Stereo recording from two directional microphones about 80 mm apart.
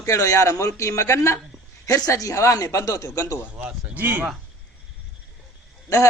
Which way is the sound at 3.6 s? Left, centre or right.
Right.